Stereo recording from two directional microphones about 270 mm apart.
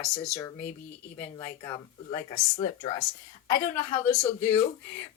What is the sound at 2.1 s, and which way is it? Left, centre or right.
Speech, centre.